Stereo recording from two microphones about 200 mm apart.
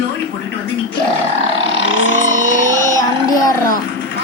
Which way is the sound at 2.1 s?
40° right (ahead or behind).